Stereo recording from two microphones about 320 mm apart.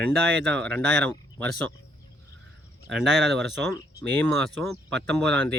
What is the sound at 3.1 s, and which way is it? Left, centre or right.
Speech, right.